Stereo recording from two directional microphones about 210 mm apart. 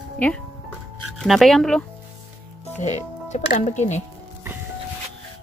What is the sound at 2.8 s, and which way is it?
Speech, 35° left (ahead or behind).